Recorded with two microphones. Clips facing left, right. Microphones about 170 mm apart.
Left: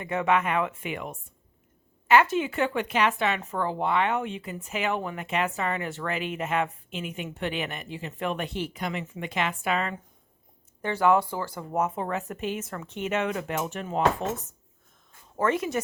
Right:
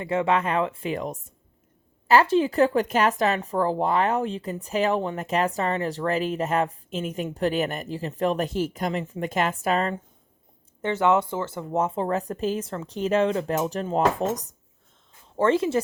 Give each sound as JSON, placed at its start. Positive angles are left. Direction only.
{"t": 0.0, "sound": "speech", "side_deg": -30}
{"t": 10.8, "sound": "speech", "side_deg": -20}